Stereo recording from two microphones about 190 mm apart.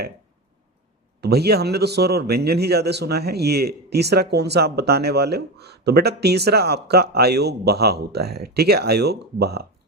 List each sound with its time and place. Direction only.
1.2 s a man's voice: 55° right (ahead or behind)